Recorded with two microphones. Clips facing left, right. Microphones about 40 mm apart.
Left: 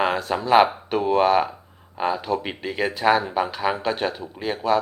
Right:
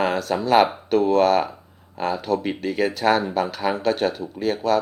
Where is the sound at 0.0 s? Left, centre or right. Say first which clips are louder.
Right 1 dB; left.